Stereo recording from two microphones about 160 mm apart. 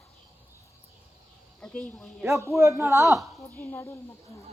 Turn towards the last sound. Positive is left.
turn(degrees=15)  # may be behind; listen again after turning